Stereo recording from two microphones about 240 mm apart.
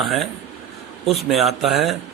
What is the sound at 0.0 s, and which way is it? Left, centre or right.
A man's voice, centre.